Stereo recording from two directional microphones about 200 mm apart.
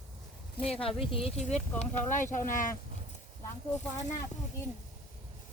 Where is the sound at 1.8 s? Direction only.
40° left (ahead or behind).